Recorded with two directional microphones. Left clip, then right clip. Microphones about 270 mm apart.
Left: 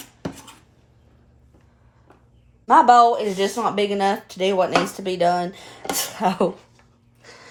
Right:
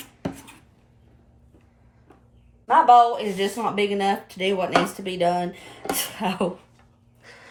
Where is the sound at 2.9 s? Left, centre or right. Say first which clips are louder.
Left 1 dB; left.